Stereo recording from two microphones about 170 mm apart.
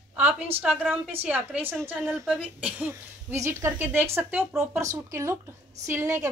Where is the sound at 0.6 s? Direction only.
10° right (ahead or behind).